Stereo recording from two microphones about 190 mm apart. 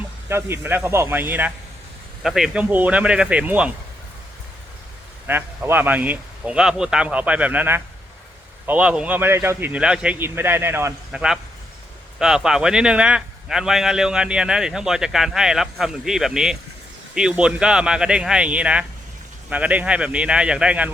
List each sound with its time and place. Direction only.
0.3 s a man's voice: 15° right (ahead or behind)
5.2 s a man's voice: 10° right (ahead or behind)